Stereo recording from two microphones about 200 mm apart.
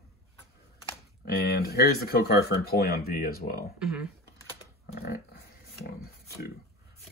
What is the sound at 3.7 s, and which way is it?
Speech, 5° right (ahead or behind).